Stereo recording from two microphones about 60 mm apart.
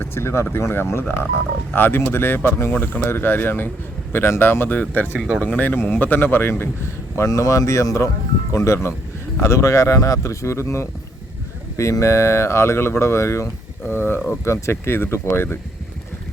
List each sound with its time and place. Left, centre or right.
0.0 s a sound: left
0.5 s speech: left
7.3 s speech: left